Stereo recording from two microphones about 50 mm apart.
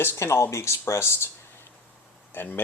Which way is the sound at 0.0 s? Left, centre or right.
Left.